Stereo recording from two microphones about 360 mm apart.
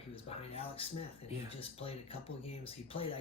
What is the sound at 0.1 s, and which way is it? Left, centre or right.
Speech, centre.